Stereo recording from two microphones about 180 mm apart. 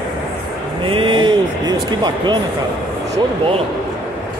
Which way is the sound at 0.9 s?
30° right (ahead or behind).